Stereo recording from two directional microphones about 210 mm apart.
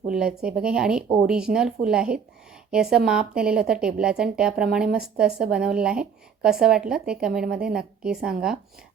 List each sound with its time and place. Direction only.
0.1 s a woman's voice: 5° right (ahead or behind)